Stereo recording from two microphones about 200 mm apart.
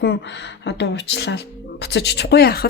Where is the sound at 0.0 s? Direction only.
60° left (ahead or behind).